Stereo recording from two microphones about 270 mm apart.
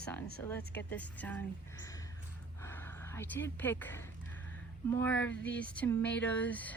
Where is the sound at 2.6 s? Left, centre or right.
Centre.